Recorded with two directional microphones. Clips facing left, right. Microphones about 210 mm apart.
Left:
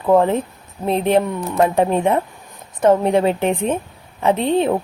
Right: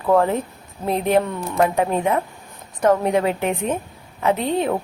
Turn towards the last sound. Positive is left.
turn(degrees=25)  # may be behind; listen again after turning